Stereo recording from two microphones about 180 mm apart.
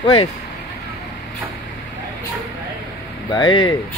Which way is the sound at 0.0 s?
30° left (ahead or behind).